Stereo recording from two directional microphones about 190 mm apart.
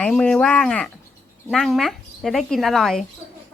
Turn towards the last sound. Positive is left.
turn(degrees=0)  # may be behind; listen again after turning